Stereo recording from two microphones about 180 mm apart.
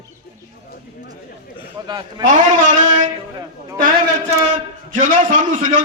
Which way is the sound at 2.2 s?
45° right (ahead or behind).